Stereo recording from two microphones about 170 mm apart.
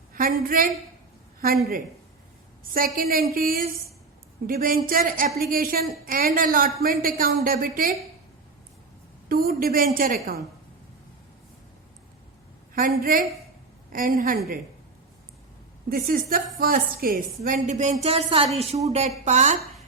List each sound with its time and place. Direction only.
0.1 s a woman's voice: 55° right (ahead or behind)
2.7 s a woman's voice: 60° right (ahead or behind)
9.3 s a woman's voice: 60° right (ahead or behind)
12.7 s a woman's voice: 55° right (ahead or behind)
15.9 s a woman's voice: 60° right (ahead or behind)
18.0 s a woman's voice: 35° right (ahead or behind)